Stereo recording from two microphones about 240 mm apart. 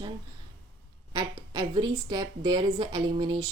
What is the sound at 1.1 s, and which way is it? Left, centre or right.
A woman's voice, centre.